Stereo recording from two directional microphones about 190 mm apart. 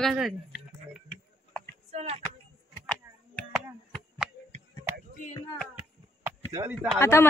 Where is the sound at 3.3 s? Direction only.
5° left (ahead or behind).